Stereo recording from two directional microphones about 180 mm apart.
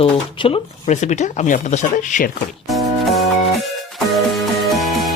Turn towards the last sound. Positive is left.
turn(degrees=0)  # may be behind; listen again after turning